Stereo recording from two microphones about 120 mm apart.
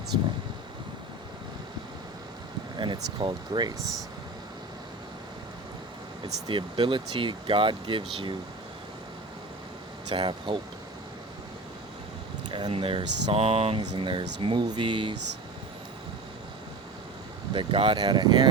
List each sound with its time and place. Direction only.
2.7 s speech: 40° right (ahead or behind)
6.5 s speech: 40° right (ahead or behind)
10.1 s speech: 40° right (ahead or behind)
12.5 s speech: 45° right (ahead or behind)
13.9 s speech: 45° right (ahead or behind)
17.5 s speech: 45° right (ahead or behind)